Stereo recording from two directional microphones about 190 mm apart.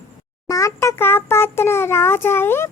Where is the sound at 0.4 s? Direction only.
15° left (ahead or behind).